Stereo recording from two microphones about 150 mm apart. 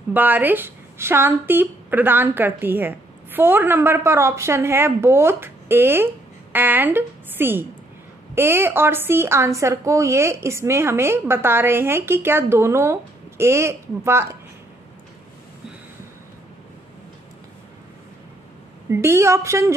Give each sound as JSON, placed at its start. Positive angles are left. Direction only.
{"t": 0.1, "sound": "a woman's voice", "side_deg": -10}
{"t": 18.9, "sound": "a woman's voice", "side_deg": -20}